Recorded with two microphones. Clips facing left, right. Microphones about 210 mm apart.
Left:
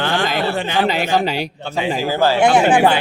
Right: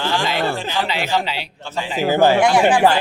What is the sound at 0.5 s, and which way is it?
Speech, 65° left (ahead or behind).